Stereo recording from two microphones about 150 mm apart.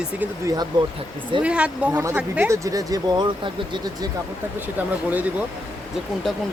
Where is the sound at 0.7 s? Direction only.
30° right (ahead or behind).